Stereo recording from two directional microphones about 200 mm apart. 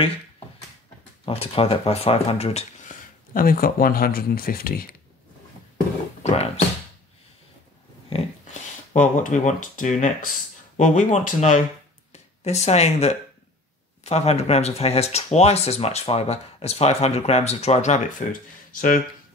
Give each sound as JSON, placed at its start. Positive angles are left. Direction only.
{"t": 1.2, "sound": "speech", "side_deg": 30}
{"t": 3.3, "sound": "speech", "side_deg": 45}
{"t": 6.2, "sound": "speech", "side_deg": 30}
{"t": 8.1, "sound": "dog", "side_deg": 30}
{"t": 8.9, "sound": "speech", "side_deg": 40}